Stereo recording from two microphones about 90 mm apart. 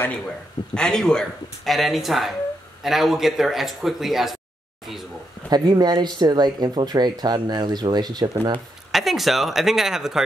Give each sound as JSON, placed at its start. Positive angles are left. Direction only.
{"t": 0.7, "sound": "speech", "side_deg": 10}
{"t": 5.5, "sound": "speech", "side_deg": -50}
{"t": 8.9, "sound": "speech", "side_deg": 0}